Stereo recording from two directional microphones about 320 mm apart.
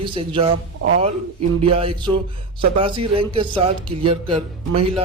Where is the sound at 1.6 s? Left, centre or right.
Centre.